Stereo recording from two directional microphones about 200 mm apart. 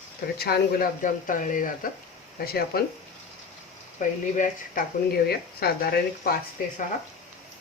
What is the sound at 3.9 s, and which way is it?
Speech, 40° left (ahead or behind).